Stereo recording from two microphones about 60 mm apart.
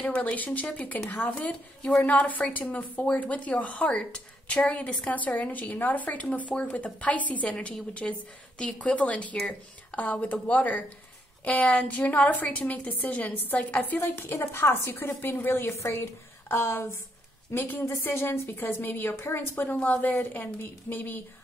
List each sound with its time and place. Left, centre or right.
0.0 s speech: left
14.2 s a woman's voice: left